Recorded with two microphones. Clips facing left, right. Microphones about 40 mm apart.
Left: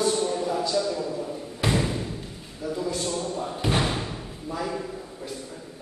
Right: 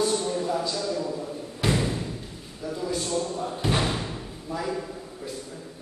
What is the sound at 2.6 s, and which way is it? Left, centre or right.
A man's voice, centre.